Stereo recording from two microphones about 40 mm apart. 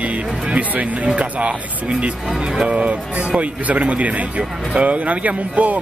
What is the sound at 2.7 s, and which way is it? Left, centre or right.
Speech, right.